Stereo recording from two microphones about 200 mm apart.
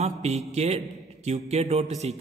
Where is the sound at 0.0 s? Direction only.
35° right (ahead or behind).